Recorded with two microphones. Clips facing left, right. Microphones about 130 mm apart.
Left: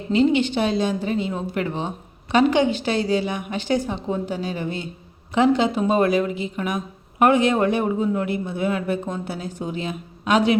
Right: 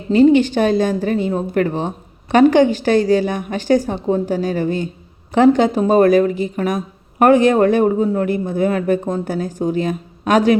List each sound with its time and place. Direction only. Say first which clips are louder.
0.1 s a woman's voice: right 7 dB; 45° right (ahead or behind)